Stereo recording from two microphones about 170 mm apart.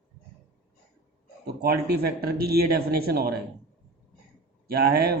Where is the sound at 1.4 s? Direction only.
70° right (ahead or behind).